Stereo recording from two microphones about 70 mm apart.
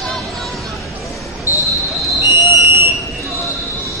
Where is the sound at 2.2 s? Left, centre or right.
Right.